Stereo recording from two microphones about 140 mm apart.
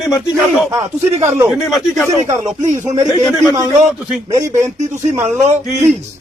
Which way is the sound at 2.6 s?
60° right (ahead or behind).